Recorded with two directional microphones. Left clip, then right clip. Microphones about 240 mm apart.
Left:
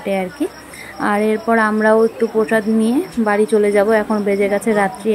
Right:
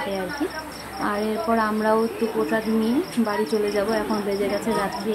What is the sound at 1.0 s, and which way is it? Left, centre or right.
Speech, left.